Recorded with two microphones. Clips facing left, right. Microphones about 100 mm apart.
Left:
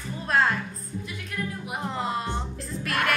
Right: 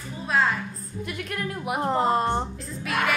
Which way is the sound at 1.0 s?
65° right (ahead or behind).